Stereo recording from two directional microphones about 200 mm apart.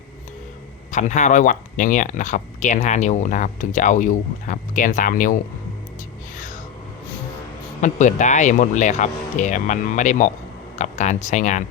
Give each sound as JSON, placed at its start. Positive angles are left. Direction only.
{"t": 0.9, "sound": "speech", "side_deg": 35}
{"t": 6.3, "sound": "a sound", "side_deg": 40}
{"t": 7.8, "sound": "speech", "side_deg": 35}